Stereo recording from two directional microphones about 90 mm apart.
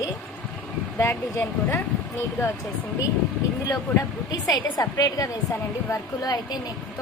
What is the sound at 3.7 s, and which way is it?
A woman's voice, 40° left (ahead or behind).